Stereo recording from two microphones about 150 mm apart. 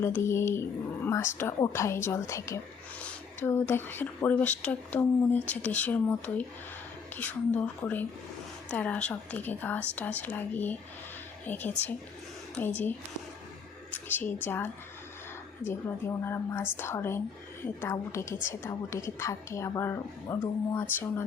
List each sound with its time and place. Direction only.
0.0 s speech: 15° left (ahead or behind)
13.9 s a woman's voice: 10° left (ahead or behind)